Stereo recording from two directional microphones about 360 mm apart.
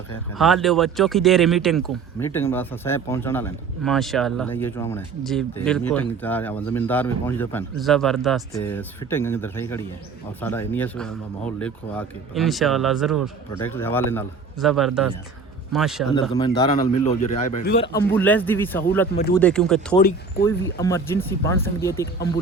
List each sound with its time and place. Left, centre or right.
0.3 s speech: centre
16.6 s a man's voice: centre
17.8 s speech: centre